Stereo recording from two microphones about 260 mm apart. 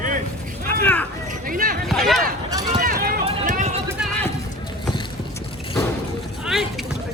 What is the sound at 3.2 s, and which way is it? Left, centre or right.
Run, right.